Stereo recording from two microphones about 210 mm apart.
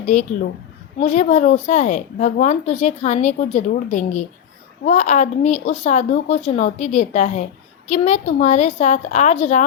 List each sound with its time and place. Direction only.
0.0 s a woman's voice: 35° left (ahead or behind)